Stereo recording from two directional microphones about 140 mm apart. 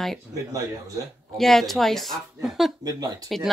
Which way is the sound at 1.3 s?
Centre (ahead or behind).